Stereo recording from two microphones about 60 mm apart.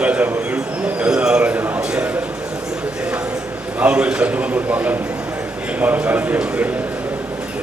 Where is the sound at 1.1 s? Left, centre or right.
Centre.